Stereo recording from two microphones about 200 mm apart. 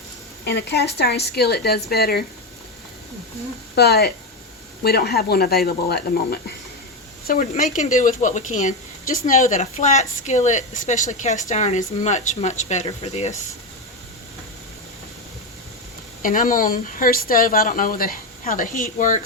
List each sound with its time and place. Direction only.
0.4 s a woman's voice: 60° left (ahead or behind)
3.8 s speech: 55° left (ahead or behind)
7.3 s a woman's voice: 40° left (ahead or behind)
16.2 s speech: 40° left (ahead or behind)